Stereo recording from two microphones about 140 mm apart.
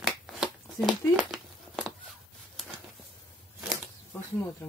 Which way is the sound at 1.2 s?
5° right (ahead or behind).